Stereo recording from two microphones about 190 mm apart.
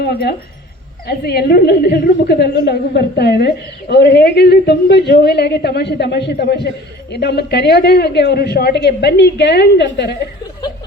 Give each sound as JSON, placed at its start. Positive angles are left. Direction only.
{"t": 0.0, "sound": "a woman's voice", "side_deg": 60}